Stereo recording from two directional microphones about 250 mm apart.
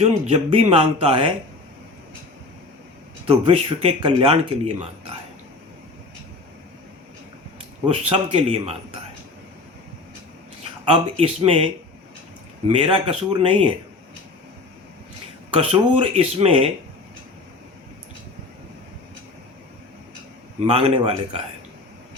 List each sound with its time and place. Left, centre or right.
0.0 s speech: right
3.2 s speech: right
7.9 s speech: right
10.9 s speech: right
15.4 s speech: right
20.7 s speech: right